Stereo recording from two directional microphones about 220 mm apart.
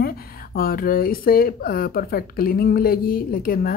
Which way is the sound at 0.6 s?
40° left (ahead or behind).